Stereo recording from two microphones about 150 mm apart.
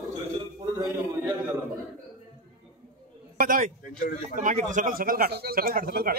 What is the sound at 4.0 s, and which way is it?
Speech, 55° left (ahead or behind).